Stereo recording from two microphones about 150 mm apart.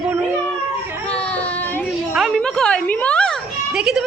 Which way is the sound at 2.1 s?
Centre (ahead or behind).